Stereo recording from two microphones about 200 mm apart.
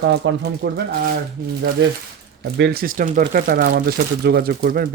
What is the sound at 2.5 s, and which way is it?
Speech, 55° right (ahead or behind).